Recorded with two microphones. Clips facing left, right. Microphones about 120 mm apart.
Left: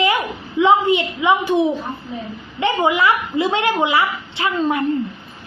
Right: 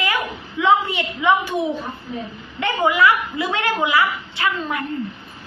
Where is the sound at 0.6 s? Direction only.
20° left (ahead or behind).